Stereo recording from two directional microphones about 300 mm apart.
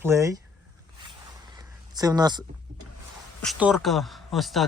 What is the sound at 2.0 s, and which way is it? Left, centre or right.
Speech, centre.